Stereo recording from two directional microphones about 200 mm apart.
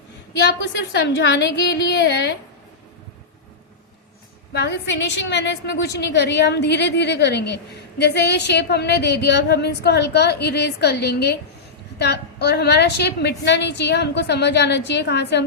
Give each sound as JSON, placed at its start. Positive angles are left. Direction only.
{"t": 0.4, "sound": "a woman's voice", "side_deg": 60}
{"t": 4.5, "sound": "a woman's voice", "side_deg": 60}